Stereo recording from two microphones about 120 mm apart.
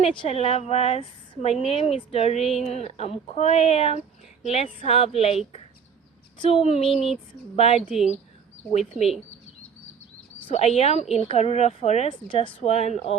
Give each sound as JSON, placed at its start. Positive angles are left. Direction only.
{"t": 0.0, "sound": "a woman's voice", "side_deg": 50}
{"t": 6.4, "sound": "a woman's voice", "side_deg": 55}
{"t": 7.9, "sound": "speech", "side_deg": -5}
{"t": 10.5, "sound": "a woman's voice", "side_deg": 65}
{"t": 12.0, "sound": "a woman's voice", "side_deg": 45}
{"t": 12.5, "sound": "a woman's voice", "side_deg": 60}